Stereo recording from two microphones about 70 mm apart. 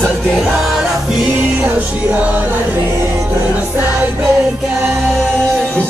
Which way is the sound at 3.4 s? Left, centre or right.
Centre.